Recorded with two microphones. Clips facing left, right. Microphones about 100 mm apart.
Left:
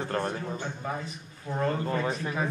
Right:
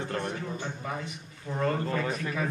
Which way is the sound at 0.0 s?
35° left (ahead or behind).